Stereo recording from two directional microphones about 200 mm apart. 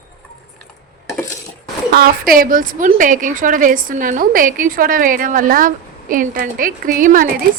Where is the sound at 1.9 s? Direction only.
45° right (ahead or behind).